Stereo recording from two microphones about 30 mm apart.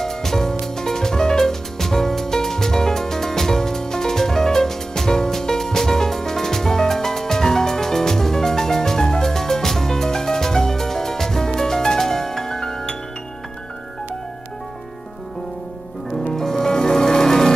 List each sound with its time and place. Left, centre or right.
0.0 s music: centre
16.3 s music: centre